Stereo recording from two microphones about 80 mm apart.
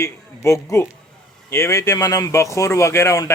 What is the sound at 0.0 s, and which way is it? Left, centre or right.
Speech, left.